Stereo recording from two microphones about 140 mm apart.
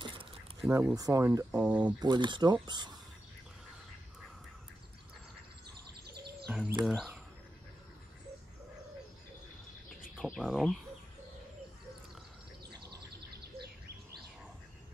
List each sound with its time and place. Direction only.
0.0 s a sound: 40° right (ahead or behind)
0.7 s speech: 20° right (ahead or behind)
1.6 s speech: 10° right (ahead or behind)
2.0 s speech: 30° right (ahead or behind)
6.5 s speech: 5° right (ahead or behind)
10.1 s speech: centre (ahead or behind)